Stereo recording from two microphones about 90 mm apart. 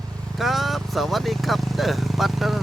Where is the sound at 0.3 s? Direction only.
Centre (ahead or behind).